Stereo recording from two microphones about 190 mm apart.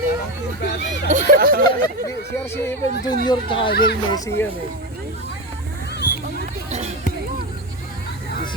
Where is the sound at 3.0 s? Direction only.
25° left (ahead or behind).